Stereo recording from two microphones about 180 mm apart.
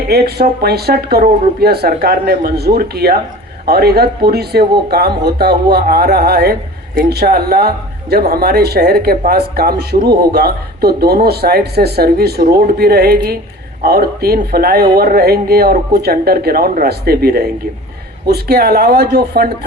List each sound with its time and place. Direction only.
0.1 s speech: 60° right (ahead or behind)